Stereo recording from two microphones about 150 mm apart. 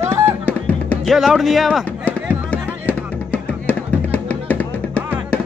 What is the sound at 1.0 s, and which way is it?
Speech, centre (ahead or behind).